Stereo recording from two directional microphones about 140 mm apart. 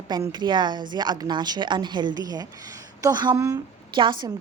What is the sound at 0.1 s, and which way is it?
A woman's voice, 30° right (ahead or behind).